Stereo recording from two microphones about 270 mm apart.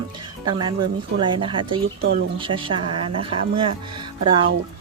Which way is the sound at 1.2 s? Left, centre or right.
Centre.